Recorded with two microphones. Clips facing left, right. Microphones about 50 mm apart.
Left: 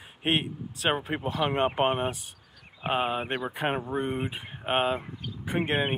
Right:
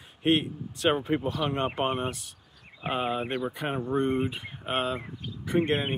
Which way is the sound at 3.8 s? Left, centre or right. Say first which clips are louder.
Right 4 dB; centre.